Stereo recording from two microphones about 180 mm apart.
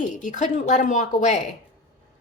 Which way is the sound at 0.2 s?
45° left (ahead or behind).